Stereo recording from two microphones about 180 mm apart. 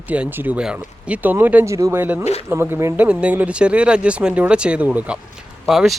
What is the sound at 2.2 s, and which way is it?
Speech, 35° left (ahead or behind).